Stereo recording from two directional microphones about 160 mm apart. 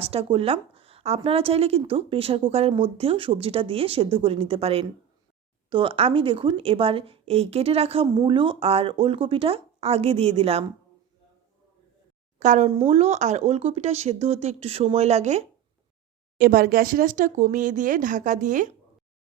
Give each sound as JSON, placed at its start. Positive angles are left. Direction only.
{"t": 0.0, "sound": "a woman's voice", "side_deg": -35}
{"t": 12.4, "sound": "speech", "side_deg": -50}
{"t": 12.7, "sound": "speech", "side_deg": -35}
{"t": 16.4, "sound": "speech", "side_deg": -65}